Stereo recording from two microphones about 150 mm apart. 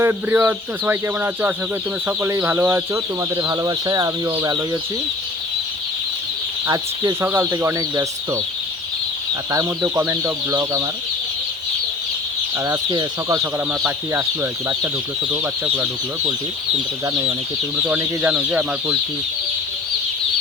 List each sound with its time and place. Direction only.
0.0 s speech: 15° right (ahead or behind)
6.7 s speech: 20° right (ahead or behind)
12.6 s speech: 25° right (ahead or behind)
13.4 s speech: 15° right (ahead or behind)
15.3 s speech: 10° right (ahead or behind)
17.8 s speech: 10° right (ahead or behind)